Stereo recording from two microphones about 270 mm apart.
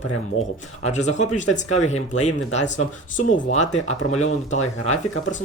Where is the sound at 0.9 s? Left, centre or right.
Left.